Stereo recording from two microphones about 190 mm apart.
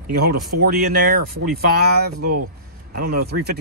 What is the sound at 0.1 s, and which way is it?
Speech, 55° right (ahead or behind).